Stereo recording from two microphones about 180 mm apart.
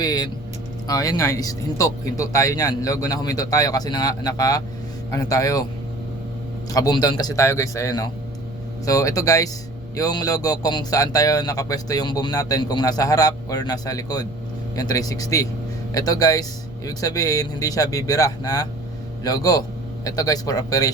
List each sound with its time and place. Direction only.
0.0 s speech: 20° left (ahead or behind)
6.7 s speech: 20° left (ahead or behind)